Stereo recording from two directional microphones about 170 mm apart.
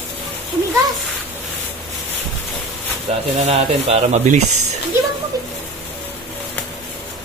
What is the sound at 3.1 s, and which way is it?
Speech, 40° right (ahead or behind).